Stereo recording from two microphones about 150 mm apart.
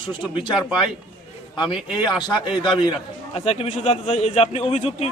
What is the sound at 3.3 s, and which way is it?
A man's voice, 45° left (ahead or behind).